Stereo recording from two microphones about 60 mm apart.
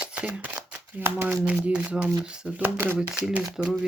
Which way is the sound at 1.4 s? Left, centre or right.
Centre.